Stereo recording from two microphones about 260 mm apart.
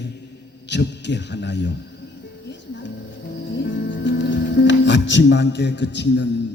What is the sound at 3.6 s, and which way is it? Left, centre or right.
Music, left.